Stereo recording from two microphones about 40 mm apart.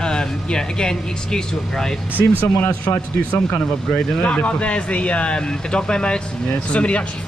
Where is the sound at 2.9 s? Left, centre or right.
Left.